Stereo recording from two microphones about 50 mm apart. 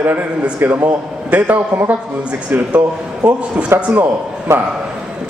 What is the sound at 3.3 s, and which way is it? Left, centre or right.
Speech, right.